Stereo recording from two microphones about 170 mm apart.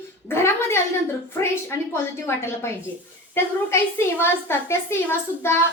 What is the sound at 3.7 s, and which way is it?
A woman's voice, 15° left (ahead or behind).